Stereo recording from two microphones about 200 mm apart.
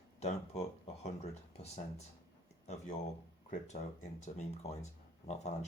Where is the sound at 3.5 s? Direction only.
35° left (ahead or behind).